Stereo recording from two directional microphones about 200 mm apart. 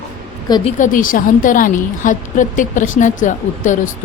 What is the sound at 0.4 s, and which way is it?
Speech, 20° left (ahead or behind).